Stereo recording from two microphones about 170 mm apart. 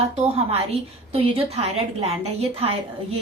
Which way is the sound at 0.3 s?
35° right (ahead or behind).